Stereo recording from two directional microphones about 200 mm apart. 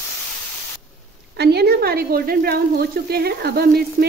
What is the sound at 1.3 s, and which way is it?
Speech, 55° right (ahead or behind).